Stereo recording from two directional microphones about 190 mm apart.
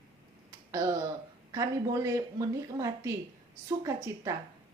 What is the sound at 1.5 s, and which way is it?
A woman's voice, 15° right (ahead or behind).